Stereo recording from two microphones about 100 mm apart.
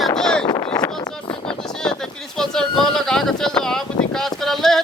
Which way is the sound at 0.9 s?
50° left (ahead or behind).